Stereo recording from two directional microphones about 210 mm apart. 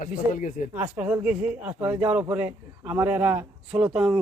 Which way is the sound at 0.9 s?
5° right (ahead or behind).